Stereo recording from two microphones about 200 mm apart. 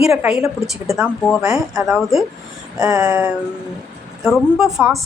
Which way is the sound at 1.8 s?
Centre (ahead or behind).